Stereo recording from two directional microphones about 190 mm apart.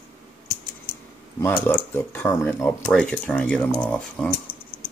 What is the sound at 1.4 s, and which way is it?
Speech, 10° left (ahead or behind).